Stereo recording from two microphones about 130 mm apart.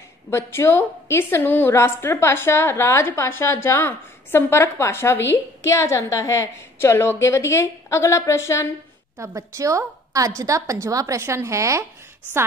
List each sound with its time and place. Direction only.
0.3 s a woman's voice: 20° left (ahead or behind)
9.2 s a woman's voice: 25° right (ahead or behind)